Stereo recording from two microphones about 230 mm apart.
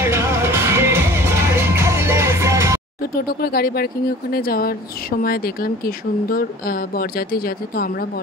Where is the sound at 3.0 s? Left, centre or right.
Left.